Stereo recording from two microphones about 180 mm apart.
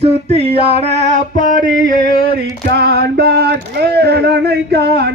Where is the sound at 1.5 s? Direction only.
50° right (ahead or behind).